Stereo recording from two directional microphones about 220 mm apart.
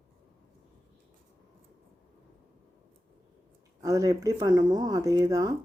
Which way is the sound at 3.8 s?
15° right (ahead or behind).